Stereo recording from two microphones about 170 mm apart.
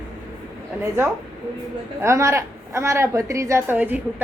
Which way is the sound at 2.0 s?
15° right (ahead or behind).